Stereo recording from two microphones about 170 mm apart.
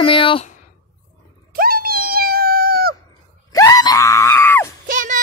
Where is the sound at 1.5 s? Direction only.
60° right (ahead or behind).